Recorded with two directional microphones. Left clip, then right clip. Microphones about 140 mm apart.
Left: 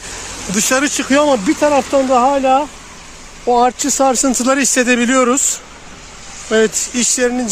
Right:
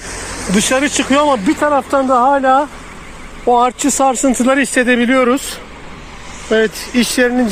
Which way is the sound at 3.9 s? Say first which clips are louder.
Right 1 dB; 30° left (ahead or behind).